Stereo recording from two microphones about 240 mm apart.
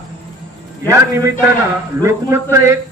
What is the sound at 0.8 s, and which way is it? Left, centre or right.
A man's voice, centre.